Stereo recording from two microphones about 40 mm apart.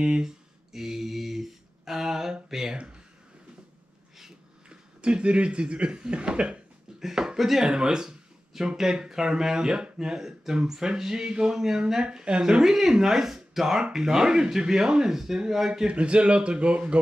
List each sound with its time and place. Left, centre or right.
0.0 s speech: centre
0.7 s a sound: centre
4.6 s speech: right
7.0 s speech: centre
12.6 s speech: centre
15.9 s speech: right